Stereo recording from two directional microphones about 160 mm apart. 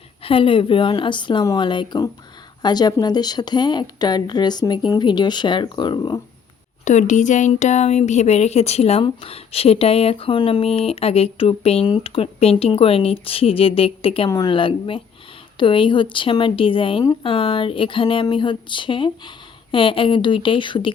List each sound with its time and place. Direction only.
0.2 s a woman's voice: 35° left (ahead or behind)
6.8 s speech: 50° left (ahead or behind); by 20.9 s 30° left (ahead or behind)